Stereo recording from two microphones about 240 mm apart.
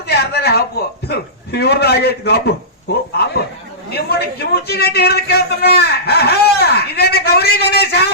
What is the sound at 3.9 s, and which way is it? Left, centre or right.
Speech, left.